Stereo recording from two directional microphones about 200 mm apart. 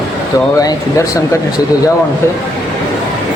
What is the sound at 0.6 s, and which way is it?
Speech, 15° left (ahead or behind).